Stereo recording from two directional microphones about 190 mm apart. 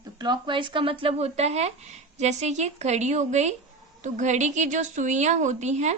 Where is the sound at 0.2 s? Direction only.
25° right (ahead or behind).